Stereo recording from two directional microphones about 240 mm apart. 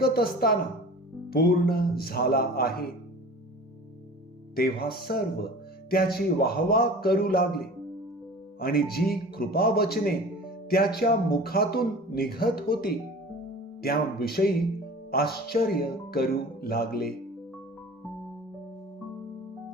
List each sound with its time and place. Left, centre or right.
0.0 s a man's voice: left
4.5 s a man's voice: left